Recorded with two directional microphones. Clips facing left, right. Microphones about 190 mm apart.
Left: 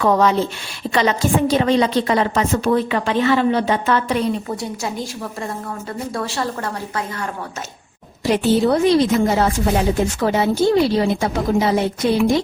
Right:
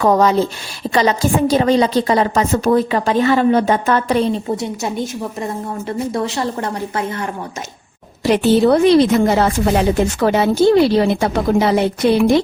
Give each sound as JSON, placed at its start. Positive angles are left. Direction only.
{"t": 0.0, "sound": "a woman's voice", "side_deg": -40}
{"t": 4.2, "sound": "a woman's voice", "side_deg": -25}
{"t": 8.2, "sound": "a woman's voice", "side_deg": -70}